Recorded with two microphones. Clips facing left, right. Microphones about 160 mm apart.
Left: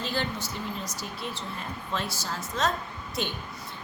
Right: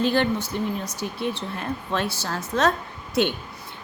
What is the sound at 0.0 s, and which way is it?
A woman's voice, 60° right (ahead or behind).